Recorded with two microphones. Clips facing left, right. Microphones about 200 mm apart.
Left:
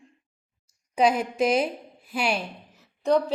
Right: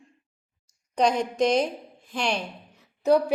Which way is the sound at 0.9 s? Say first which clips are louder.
Left 1 dB; 5° left (ahead or behind).